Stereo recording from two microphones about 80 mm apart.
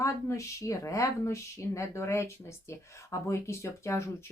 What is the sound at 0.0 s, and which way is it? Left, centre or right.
Speech, left.